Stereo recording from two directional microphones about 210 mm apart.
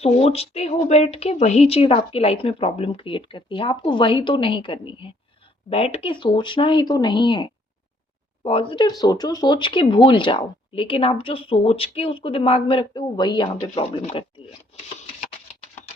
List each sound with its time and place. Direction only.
0.0 s speech: 30° left (ahead or behind)